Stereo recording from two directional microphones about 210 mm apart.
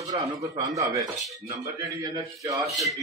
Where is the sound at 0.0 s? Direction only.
15° right (ahead or behind).